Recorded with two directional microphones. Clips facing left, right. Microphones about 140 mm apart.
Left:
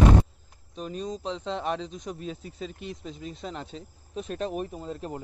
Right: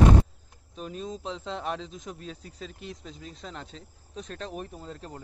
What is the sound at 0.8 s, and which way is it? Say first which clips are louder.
Speech: left 3 dB; centre (ahead or behind).